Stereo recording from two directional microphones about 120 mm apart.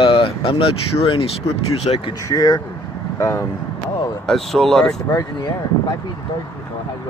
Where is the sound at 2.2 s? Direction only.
30° left (ahead or behind).